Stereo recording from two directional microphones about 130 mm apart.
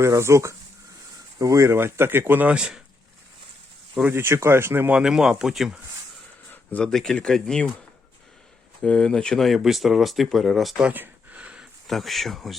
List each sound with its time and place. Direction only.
0.0 s speech: 20° right (ahead or behind); by 2.8 s 5° right (ahead or behind)
4.1 s speech: 20° right (ahead or behind); by 5.8 s 5° right (ahead or behind)
6.5 s speech: 10° left (ahead or behind)
8.8 s speech: 5° left (ahead or behind)